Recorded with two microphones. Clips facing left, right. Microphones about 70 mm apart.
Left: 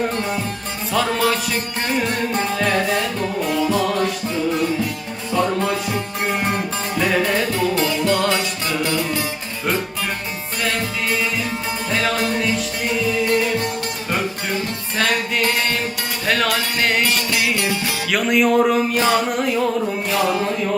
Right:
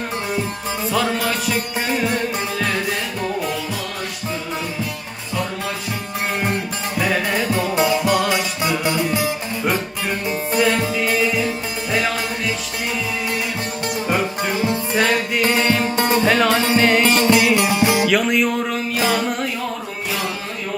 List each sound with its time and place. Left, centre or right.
0.9 s music: centre
6.9 s music: centre
7.5 s music: centre
10.6 s music: centre
14.1 s music: centre
15.8 s music: right
16.2 s music: centre
16.5 s music: right
16.8 s music: centre
17.2 s music: right
18.1 s music: centre